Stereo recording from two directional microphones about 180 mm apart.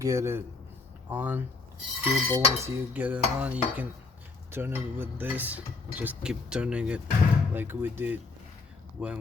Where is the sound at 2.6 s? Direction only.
10° right (ahead or behind).